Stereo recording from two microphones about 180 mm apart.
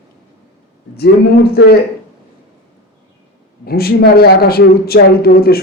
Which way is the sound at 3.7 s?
60° left (ahead or behind).